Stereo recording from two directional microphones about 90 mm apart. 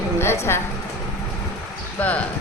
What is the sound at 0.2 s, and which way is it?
Speech, 30° left (ahead or behind).